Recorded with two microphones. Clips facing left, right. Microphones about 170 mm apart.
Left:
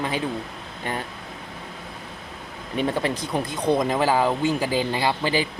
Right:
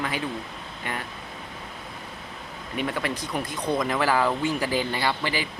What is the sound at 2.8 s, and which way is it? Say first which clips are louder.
Speech: left 4 dB; 30° left (ahead or behind).